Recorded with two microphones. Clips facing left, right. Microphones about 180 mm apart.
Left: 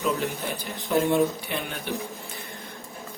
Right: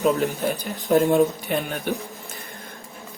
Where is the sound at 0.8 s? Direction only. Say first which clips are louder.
Right 4 dB; 40° right (ahead or behind).